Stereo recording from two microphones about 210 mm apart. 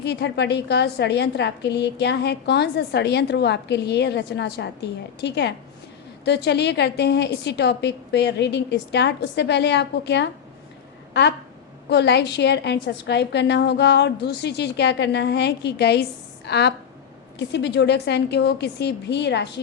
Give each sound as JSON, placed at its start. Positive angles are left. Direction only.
{"t": 0.0, "sound": "a woman's voice", "side_deg": 55}